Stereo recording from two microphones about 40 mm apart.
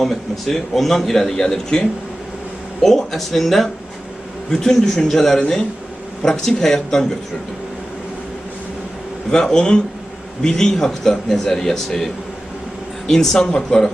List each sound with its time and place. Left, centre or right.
0.0 s speech: centre
4.5 s speech: centre
9.3 s speech: centre
13.1 s speech: centre